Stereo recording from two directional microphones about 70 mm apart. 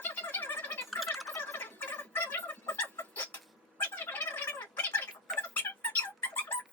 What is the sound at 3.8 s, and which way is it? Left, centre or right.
Gargling, left.